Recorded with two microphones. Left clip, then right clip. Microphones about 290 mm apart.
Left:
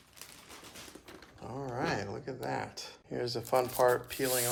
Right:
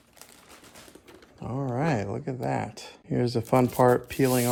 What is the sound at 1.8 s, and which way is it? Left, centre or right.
Speech, right.